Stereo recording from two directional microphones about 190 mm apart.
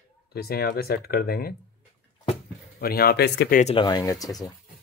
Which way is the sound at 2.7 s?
55° left (ahead or behind).